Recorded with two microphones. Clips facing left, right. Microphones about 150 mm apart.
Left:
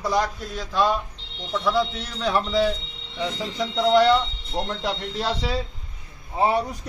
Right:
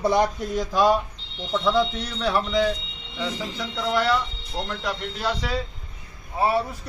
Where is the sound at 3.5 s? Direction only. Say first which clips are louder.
Left 8 dB; 25° left (ahead or behind).